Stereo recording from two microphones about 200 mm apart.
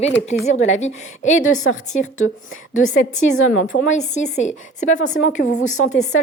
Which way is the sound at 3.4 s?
80° left.